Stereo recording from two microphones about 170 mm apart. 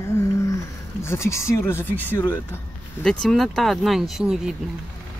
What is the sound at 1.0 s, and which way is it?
Speech, 15° left (ahead or behind).